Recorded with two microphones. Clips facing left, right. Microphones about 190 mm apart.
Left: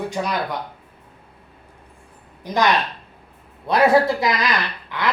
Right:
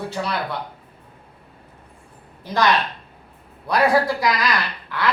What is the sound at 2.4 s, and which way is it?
Speech, 15° left (ahead or behind).